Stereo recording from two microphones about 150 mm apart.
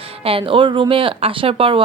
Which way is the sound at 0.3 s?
35° right (ahead or behind).